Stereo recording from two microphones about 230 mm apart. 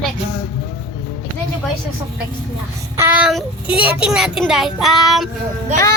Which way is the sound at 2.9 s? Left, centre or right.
Centre.